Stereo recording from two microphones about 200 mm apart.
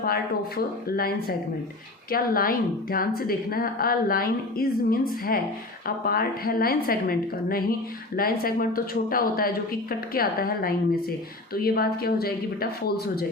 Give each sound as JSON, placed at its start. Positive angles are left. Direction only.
{"t": 0.0, "sound": "speech", "side_deg": 50}